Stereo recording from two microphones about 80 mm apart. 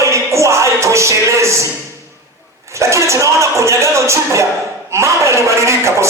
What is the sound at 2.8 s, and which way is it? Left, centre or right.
Speech, right.